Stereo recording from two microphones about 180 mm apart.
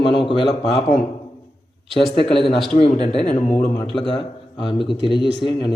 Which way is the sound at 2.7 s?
35° left (ahead or behind).